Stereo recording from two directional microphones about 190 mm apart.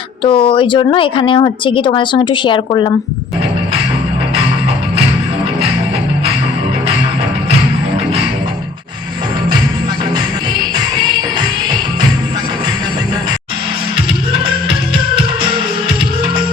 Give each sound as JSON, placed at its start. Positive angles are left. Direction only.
{"t": 0.2, "sound": "speech", "side_deg": 30}